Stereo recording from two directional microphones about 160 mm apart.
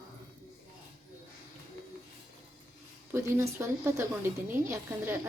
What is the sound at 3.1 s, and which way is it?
A woman's voice, 15° right (ahead or behind).